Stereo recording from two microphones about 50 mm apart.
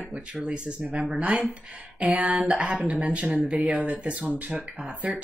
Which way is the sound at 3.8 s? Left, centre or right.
Right.